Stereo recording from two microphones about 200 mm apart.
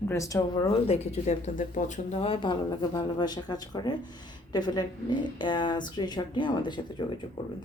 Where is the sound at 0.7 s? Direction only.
30° left (ahead or behind).